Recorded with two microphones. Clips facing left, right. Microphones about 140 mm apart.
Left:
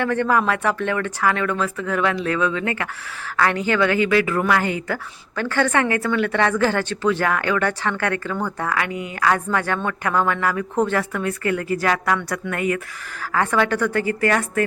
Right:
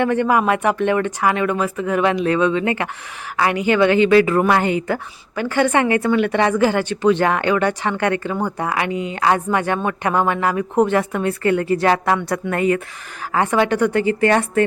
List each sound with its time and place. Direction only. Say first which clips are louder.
0.0 s a woman's voice: right 3 dB; 15° right (ahead or behind)